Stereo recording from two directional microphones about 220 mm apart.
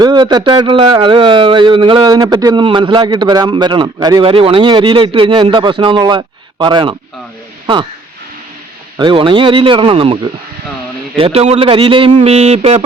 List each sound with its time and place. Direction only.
0.0 s speech: 20° right (ahead or behind)
9.0 s speech: 20° right (ahead or behind)
11.2 s speech: 25° right (ahead or behind)